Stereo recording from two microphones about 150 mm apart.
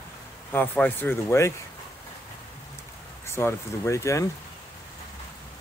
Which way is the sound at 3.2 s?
15° left (ahead or behind).